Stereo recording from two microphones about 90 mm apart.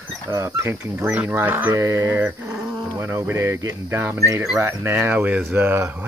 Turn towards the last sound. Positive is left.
turn(degrees=-20)  # may be behind; listen again after turning